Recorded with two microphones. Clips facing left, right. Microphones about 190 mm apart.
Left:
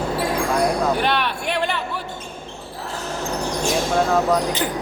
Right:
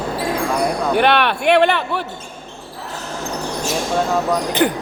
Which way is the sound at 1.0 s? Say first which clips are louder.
Right 6 dB; 70° right (ahead or behind).